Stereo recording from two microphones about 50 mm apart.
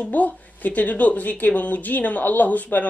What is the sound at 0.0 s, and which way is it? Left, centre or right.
Speech, left.